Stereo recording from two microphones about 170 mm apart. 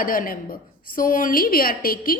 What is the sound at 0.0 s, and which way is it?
A woman's voice, 55° left (ahead or behind).